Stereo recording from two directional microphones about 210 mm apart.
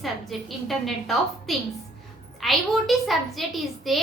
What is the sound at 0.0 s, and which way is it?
A woman's voice, centre (ahead or behind).